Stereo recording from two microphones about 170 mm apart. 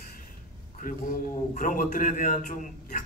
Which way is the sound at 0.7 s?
55° left (ahead or behind).